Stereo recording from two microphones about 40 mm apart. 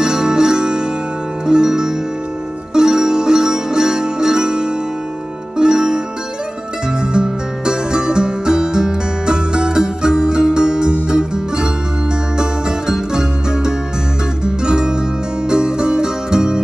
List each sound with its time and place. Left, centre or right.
0.0 s music: centre
5.6 s zither: right
7.0 s music: right